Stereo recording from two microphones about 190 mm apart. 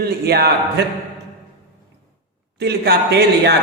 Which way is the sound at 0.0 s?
55° right (ahead or behind).